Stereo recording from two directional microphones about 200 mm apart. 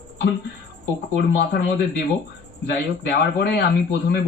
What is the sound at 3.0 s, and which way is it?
Speech, 55° left (ahead or behind).